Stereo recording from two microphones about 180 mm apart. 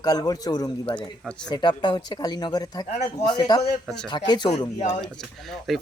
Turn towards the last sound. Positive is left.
turn(degrees=0)  # may be behind; listen again after turning